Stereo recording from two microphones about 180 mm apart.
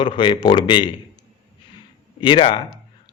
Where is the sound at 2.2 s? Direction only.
25° left (ahead or behind).